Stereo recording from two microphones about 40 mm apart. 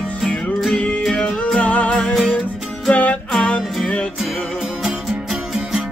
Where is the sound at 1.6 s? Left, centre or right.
Left.